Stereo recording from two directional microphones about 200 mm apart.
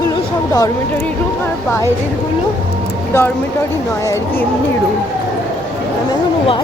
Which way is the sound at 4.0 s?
15° left (ahead or behind).